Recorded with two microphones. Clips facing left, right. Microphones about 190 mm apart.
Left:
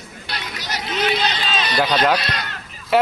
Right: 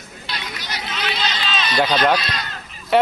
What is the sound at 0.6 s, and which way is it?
Run, 40° left (ahead or behind).